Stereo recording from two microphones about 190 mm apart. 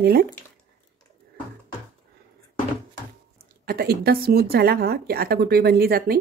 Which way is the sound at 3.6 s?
55° right (ahead or behind).